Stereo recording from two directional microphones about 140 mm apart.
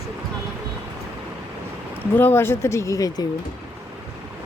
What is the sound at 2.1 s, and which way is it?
Speech, 15° left (ahead or behind).